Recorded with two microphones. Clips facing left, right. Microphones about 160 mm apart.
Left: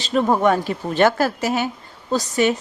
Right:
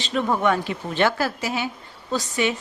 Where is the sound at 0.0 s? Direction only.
40° left (ahead or behind).